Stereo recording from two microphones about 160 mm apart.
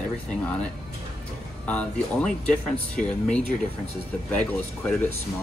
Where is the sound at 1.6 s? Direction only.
10° left (ahead or behind).